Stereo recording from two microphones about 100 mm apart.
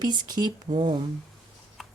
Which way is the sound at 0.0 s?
45° right (ahead or behind).